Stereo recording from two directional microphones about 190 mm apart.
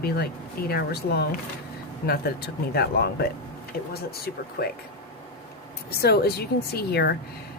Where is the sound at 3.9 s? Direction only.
55° left (ahead or behind).